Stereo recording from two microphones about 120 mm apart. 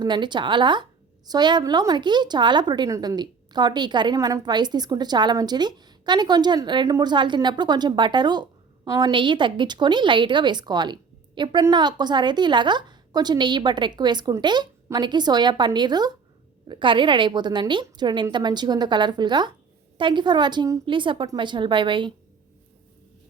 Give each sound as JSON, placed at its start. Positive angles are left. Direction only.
{"t": 0.0, "sound": "a woman's voice", "side_deg": -40}
{"t": 20.8, "sound": "a woman's voice", "side_deg": -45}